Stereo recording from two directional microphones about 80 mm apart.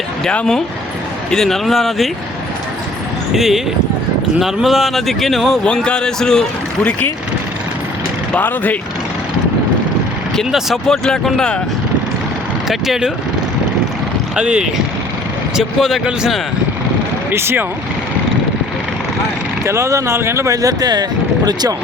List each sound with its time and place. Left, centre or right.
0.3 s a man's voice: centre
3.3 s speech: centre
5.6 s a man's voice: centre
8.4 s speech: left
10.3 s a man's voice: centre
12.6 s speech: centre
14.3 s speech: centre
17.3 s speech: right
19.6 s speech: right